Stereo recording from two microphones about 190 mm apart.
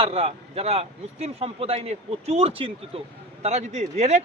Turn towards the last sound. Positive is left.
turn(degrees=-35)  # may be behind; listen again after turning